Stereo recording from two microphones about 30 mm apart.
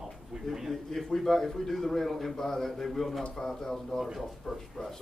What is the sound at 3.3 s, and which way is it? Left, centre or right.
Speech, centre.